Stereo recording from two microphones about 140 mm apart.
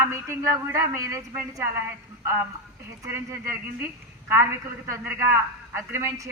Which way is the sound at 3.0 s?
15° right (ahead or behind).